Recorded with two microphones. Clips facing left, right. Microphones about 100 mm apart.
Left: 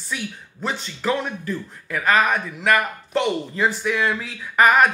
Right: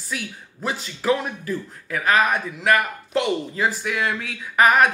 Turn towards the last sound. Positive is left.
turn(degrees=0)  # may be behind; listen again after turning